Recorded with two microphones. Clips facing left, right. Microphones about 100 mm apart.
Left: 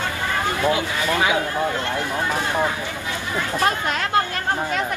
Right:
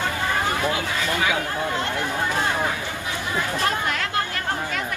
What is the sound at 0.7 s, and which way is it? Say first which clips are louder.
Speech: left 3 dB; 25° left (ahead or behind).